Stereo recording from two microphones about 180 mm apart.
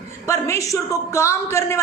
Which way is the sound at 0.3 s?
15° left (ahead or behind).